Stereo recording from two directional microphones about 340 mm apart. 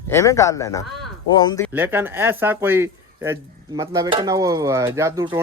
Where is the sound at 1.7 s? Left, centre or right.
Centre.